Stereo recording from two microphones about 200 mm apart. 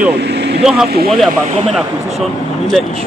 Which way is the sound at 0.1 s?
55° right (ahead or behind).